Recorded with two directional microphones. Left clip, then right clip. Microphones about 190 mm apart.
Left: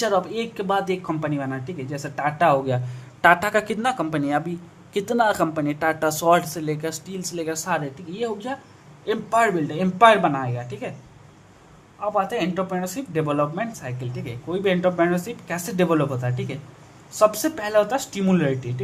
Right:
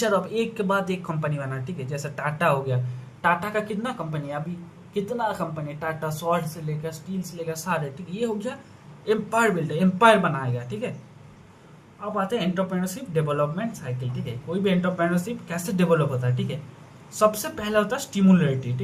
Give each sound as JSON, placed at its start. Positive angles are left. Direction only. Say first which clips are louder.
{"t": 0.0, "sound": "speech", "louder": "left 1 dB", "side_deg": 25}
{"t": 12.1, "sound": "speech", "louder": "left 2 dB", "side_deg": 30}